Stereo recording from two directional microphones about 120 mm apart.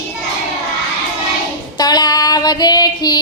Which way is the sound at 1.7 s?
35° left (ahead or behind).